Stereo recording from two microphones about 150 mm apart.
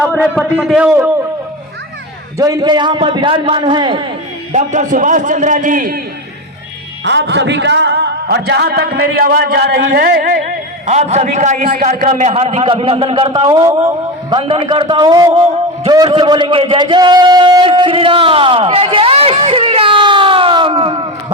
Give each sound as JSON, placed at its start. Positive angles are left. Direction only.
{"t": 0.6, "sound": "a man's voice", "side_deg": -5}
{"t": 2.4, "sound": "a man's voice", "side_deg": -25}
{"t": 4.5, "sound": "a man's voice", "side_deg": -55}
{"t": 7.9, "sound": "a man's voice", "side_deg": -90}
{"t": 10.8, "sound": "a man's voice", "side_deg": -50}